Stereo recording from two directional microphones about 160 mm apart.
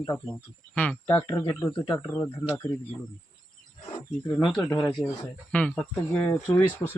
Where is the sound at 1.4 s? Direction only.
20° left (ahead or behind).